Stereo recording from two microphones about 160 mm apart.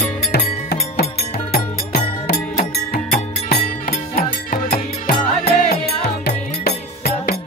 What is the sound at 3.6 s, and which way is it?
Music, 45° left (ahead or behind).